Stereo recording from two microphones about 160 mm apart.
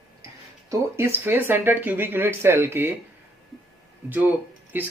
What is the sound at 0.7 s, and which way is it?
Speech, 15° right (ahead or behind).